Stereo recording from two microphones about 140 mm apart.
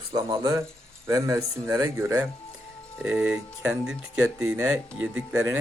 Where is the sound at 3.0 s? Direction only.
5° right (ahead or behind).